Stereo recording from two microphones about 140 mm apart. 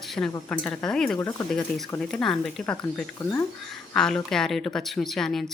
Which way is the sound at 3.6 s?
5° left (ahead or behind).